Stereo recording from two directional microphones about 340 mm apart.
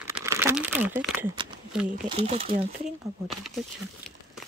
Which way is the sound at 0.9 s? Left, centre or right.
Centre.